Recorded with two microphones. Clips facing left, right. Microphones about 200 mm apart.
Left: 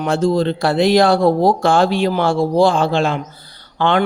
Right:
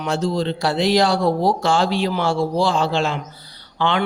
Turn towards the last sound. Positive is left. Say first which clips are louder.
# left 4 dB
turn(degrees=50)  # may be behind; listen again after turning